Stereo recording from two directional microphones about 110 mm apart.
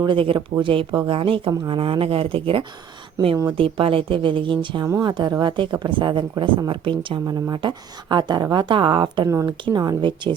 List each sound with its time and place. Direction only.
0.0 s a woman's voice: 50° right (ahead or behind)
9.2 s speech: 25° right (ahead or behind)
9.5 s a woman's voice: 40° right (ahead or behind)